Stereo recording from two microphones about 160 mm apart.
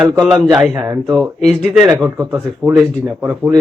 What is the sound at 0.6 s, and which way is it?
A man's voice, 10° right (ahead or behind).